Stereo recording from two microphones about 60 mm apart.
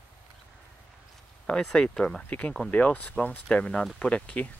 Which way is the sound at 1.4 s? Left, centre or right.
Centre.